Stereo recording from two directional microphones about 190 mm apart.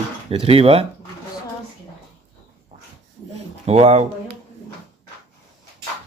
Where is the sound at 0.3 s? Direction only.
30° right (ahead or behind).